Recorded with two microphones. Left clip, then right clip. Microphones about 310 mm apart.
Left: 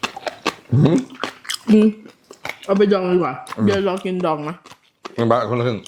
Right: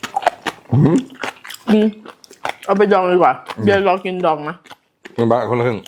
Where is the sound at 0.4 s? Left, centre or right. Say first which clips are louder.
Right 1 dB; left.